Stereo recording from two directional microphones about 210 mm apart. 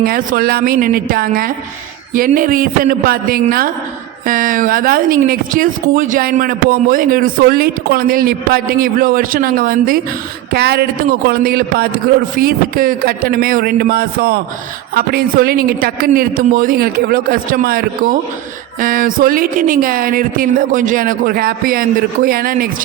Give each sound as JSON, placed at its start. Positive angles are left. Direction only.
{"t": 0.0, "sound": "speech", "side_deg": -45}